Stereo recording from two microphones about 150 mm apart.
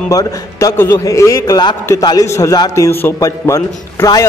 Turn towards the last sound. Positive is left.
turn(degrees=20)  # may be behind; listen again after turning